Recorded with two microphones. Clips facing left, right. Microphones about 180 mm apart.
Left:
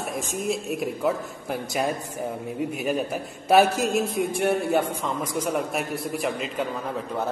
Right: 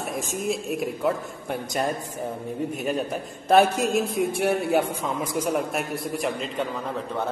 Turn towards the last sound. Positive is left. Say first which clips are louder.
# even
turn(degrees=0)  # may be behind; listen again after turning